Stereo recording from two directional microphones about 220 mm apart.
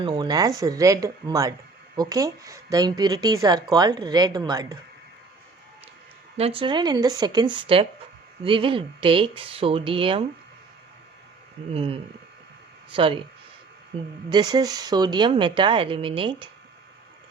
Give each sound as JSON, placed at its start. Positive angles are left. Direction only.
{"t": 0.0, "sound": "a woman's voice", "side_deg": -20}
{"t": 6.3, "sound": "speech", "side_deg": -25}
{"t": 11.7, "sound": "speech", "side_deg": -25}
{"t": 14.3, "sound": "speech", "side_deg": -20}